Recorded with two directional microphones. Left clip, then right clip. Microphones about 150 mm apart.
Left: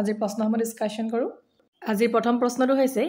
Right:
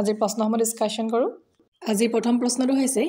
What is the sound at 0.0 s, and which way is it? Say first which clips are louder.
A woman's voice: right 3 dB; 35° right (ahead or behind).